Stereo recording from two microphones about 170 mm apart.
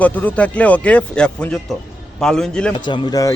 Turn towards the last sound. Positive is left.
turn(degrees=20)  # may be behind; listen again after turning